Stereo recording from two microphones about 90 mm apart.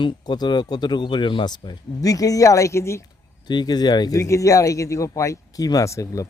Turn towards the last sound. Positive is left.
turn(degrees=35)  # may be behind; listen again after turning